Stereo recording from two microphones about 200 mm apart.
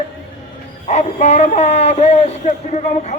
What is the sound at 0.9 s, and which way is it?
Music, 35° left (ahead or behind).